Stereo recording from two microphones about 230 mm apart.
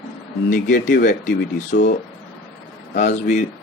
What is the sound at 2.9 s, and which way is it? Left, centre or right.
Speech, left.